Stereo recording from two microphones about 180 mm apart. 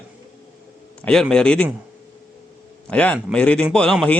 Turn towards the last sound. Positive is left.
turn(degrees=5)  # may be behind; listen again after turning